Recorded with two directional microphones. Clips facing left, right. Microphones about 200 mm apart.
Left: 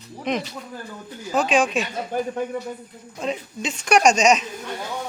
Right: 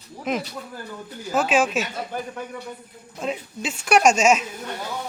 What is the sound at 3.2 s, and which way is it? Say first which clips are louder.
Speech: left 1 dB; 5° right (ahead or behind).